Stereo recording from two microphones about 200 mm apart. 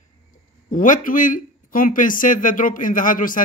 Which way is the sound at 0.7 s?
40° left (ahead or behind).